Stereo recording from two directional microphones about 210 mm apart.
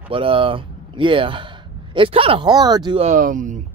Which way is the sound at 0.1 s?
25° right (ahead or behind).